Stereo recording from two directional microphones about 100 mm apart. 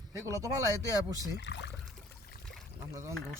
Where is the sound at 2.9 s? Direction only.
30° right (ahead or behind).